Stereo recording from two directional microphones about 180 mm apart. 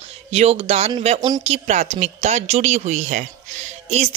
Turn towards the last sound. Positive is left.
turn(degrees=-40)  # may be behind; listen again after turning